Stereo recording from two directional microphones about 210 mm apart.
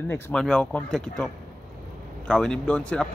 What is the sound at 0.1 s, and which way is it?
Speech, 5° left (ahead or behind).